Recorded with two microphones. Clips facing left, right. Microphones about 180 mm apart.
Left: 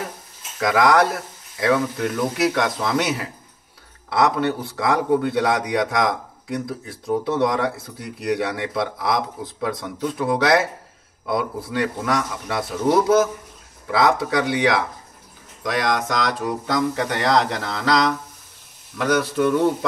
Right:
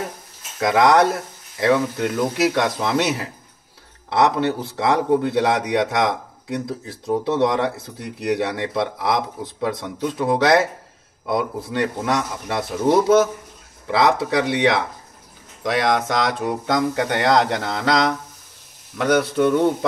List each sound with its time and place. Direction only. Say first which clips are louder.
0.6 s a man's voice: right 2 dB; 25° right (ahead or behind)
19.3 s a man's voice: right 1 dB; 25° right (ahead or behind)